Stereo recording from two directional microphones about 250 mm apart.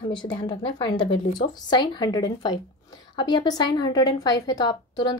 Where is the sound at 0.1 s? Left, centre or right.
Centre.